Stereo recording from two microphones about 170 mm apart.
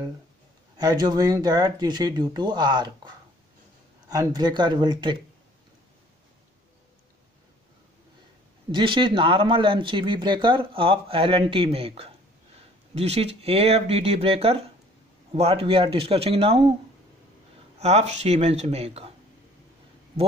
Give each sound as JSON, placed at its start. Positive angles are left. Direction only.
{"t": 0.7, "sound": "speech", "side_deg": -25}
{"t": 4.1, "sound": "speech", "side_deg": -20}
{"t": 8.7, "sound": "speech", "side_deg": -30}
{"t": 17.7, "sound": "speech", "side_deg": -40}